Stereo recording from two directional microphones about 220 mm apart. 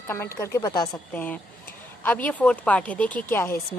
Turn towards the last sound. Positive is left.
turn(degrees=10)  # may be behind; listen again after turning